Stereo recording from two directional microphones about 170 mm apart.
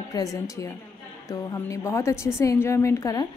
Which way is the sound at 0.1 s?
20° left (ahead or behind).